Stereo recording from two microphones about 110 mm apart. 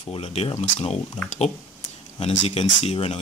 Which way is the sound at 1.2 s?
90° left.